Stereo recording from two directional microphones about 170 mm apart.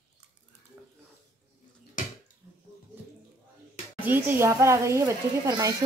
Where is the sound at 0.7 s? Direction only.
10° right (ahead or behind).